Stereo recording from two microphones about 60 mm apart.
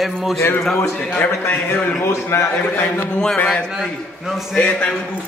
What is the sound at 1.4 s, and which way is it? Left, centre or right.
A man's voice, left.